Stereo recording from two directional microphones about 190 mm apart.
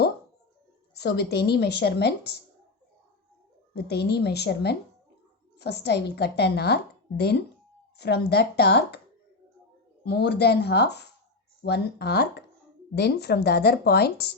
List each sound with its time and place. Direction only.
0.9 s speech: 60° left (ahead or behind)
3.8 s speech: 60° left (ahead or behind)
10.1 s speech: 60° left (ahead or behind)